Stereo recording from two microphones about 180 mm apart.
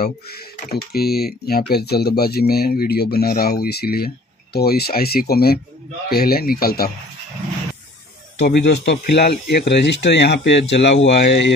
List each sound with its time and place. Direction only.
0.0 s speech: 60° left (ahead or behind)
8.4 s speech: 65° left (ahead or behind)